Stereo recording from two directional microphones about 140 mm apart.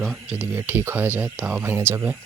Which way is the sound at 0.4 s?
15° right (ahead or behind).